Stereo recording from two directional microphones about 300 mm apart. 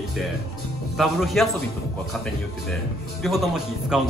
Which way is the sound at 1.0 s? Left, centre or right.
Centre.